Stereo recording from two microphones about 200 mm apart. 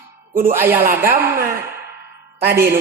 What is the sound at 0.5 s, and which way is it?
Speech, 10° right (ahead or behind).